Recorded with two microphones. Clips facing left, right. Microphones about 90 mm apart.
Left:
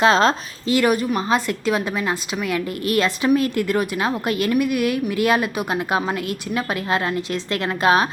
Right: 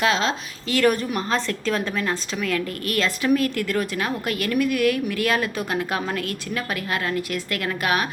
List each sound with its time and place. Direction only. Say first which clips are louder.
0.0 s speech: left 6 dB; 40° left (ahead or behind)
0.7 s a woman's voice: left 2 dB; 15° left (ahead or behind)